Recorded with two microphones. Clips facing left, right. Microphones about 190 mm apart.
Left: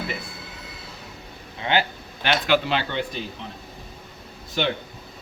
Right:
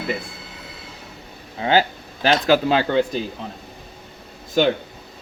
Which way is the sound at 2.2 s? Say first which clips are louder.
Right 5 dB; 40° right (ahead or behind).